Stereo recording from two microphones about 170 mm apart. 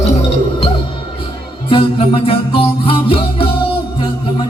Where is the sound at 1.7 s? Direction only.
35° left (ahead or behind).